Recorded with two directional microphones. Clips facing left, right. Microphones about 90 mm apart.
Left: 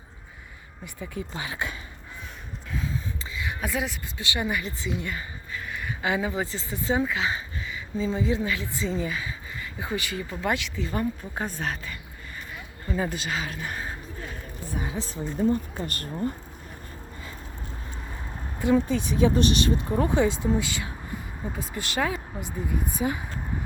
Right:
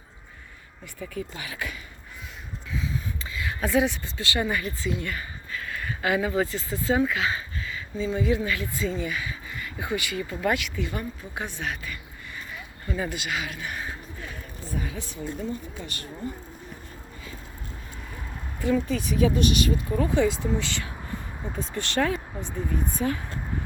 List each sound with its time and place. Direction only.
0.9 s speech: 20° left (ahead or behind)
3.3 s a sound: 20° left (ahead or behind)
3.7 s speech: centre (ahead or behind)
4.2 s speech: 15° left (ahead or behind)
7.1 s a sound: 20° left (ahead or behind)
8.0 s speech: 30° left (ahead or behind)
15.4 s speech: 45° left (ahead or behind)
18.6 s speech: 25° left (ahead or behind)
21.4 s speech: 5° left (ahead or behind)